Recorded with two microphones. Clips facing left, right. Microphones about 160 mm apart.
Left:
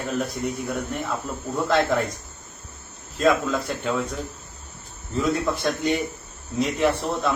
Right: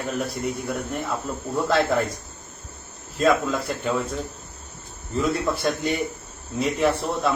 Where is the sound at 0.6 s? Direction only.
10° left (ahead or behind).